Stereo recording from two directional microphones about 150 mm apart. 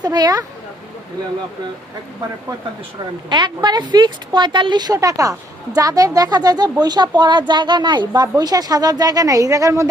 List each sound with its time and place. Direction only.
0.0 s speech: 25° right (ahead or behind)
3.2 s speech: 30° right (ahead or behind)